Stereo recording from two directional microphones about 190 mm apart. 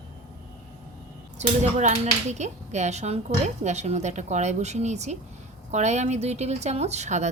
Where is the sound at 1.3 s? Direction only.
35° right (ahead or behind).